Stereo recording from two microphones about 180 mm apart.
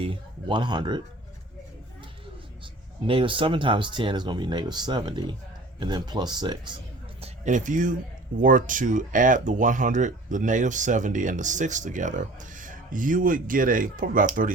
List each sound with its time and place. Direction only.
0.0 s speech: 25° right (ahead or behind)
3.1 s speech: 30° right (ahead or behind)
7.2 s speech: 45° right (ahead or behind)